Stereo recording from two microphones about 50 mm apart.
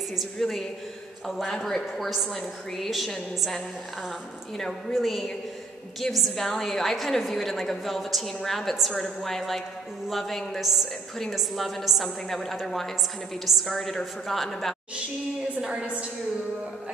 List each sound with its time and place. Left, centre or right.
0.1 s a woman's voice: centre
4.9 s a woman's voice: centre
15.6 s a woman's voice: centre